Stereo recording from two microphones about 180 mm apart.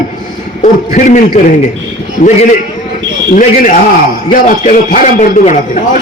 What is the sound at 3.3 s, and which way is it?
A man's voice, 45° left (ahead or behind).